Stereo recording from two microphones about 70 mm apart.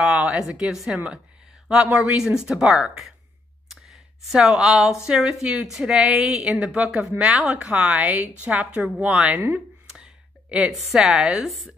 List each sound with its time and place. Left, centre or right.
0.0 s a woman's voice: centre
3.6 s a sound: centre
5.0 s a woman's voice: centre
6.5 s a woman's voice: centre
9.9 s a sound: centre
10.7 s a woman's voice: centre